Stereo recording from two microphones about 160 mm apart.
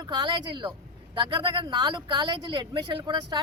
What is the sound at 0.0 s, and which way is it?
Speech, 30° right (ahead or behind).